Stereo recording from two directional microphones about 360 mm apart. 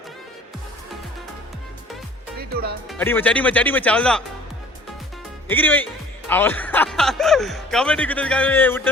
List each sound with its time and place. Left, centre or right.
2.4 s speech: right
2.8 s speech: centre
5.5 s speech: centre